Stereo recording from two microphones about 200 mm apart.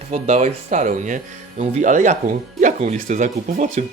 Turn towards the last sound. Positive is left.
turn(degrees=-40)  # may be behind; listen again after turning